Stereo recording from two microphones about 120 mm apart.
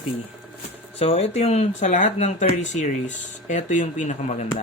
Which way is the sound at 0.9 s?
60° left (ahead or behind).